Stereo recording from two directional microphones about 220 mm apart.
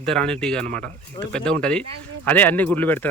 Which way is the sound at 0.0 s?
5° left (ahead or behind).